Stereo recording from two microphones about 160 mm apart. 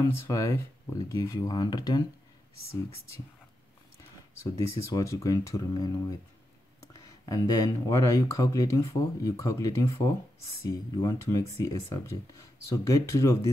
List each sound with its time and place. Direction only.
0.0 s speech: 20° left (ahead or behind)
4.4 s speech: 20° left (ahead or behind)
7.2 s speech: 25° left (ahead or behind)